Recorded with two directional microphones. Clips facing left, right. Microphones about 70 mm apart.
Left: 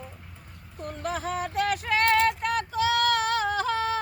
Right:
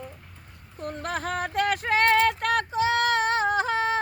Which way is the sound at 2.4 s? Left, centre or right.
Right.